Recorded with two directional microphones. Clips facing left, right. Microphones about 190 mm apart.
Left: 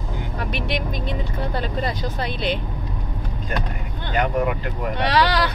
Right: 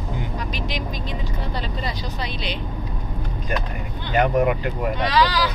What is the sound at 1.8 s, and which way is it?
Speech, 50° left (ahead or behind).